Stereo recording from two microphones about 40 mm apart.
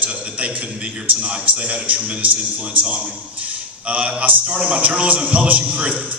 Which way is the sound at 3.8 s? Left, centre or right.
Right.